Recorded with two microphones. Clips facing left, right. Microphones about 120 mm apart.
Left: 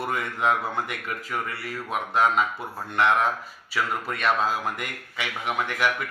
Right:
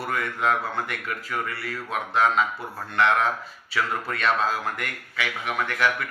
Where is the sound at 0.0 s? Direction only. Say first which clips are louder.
Even; 15° left (ahead or behind).